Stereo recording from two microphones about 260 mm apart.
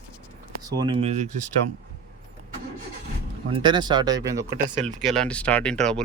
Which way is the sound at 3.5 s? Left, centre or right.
Centre.